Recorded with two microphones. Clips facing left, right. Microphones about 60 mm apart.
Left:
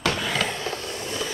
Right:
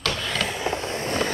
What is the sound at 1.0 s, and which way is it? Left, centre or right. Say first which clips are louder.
Train: right 6 dB; right.